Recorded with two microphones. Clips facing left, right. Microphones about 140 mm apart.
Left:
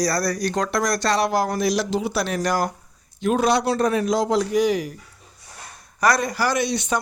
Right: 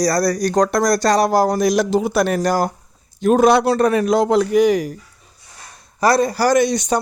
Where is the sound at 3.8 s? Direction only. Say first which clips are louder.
Right 5 dB; 60° right (ahead or behind).